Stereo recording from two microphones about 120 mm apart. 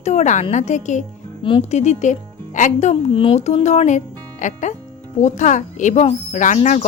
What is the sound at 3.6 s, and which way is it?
A woman's voice, 75° left (ahead or behind).